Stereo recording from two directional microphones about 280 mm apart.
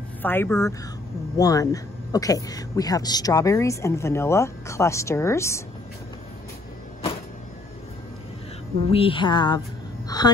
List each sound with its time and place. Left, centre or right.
0.2 s speech: centre
8.9 s speech: centre
10.0 s a sound: centre